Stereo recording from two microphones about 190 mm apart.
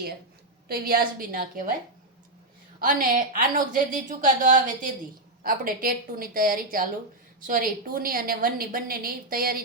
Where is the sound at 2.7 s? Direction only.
45° right (ahead or behind).